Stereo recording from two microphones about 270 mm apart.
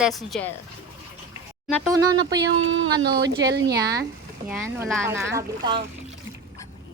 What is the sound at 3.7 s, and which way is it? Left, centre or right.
Speech, centre.